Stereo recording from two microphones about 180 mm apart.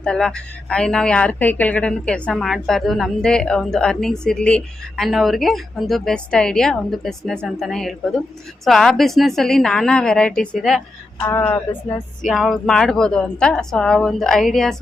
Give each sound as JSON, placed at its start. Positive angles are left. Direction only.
{"t": 0.0, "sound": "speech", "side_deg": 5}
{"t": 11.2, "sound": "speech", "side_deg": 15}
{"t": 12.3, "sound": "speech", "side_deg": 0}